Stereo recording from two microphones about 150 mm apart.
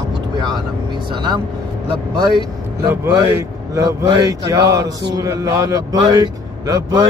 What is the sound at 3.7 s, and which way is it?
Mantra, 25° right (ahead or behind).